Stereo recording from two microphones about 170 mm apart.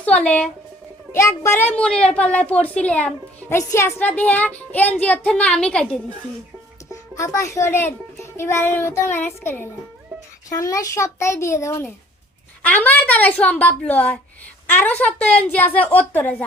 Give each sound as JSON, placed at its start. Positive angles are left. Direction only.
{"t": 0.0, "sound": "a child's voice", "side_deg": 10}
{"t": 6.9, "sound": "a child's voice", "side_deg": 20}